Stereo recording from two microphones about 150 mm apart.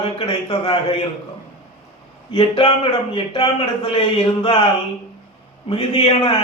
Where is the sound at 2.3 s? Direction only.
35° left (ahead or behind).